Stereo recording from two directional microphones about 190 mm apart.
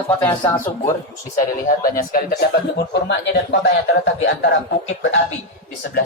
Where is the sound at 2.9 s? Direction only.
65° left (ahead or behind).